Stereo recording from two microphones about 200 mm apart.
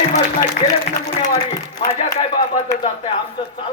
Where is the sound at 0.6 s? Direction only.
45° left (ahead or behind).